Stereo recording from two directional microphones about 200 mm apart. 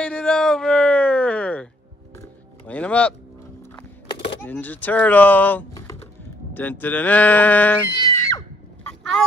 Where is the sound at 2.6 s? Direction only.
5° left (ahead or behind).